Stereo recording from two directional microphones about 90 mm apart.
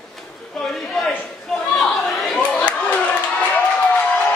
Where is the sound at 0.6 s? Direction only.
5° left (ahead or behind).